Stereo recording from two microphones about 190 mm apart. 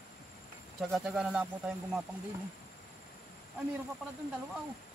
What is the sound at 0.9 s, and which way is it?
Speech, 5° right (ahead or behind).